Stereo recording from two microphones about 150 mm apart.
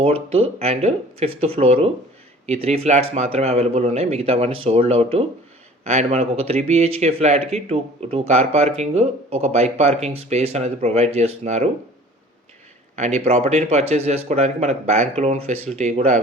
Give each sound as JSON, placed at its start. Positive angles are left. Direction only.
{"t": 0.0, "sound": "speech", "side_deg": -40}
{"t": 13.0, "sound": "speech", "side_deg": -50}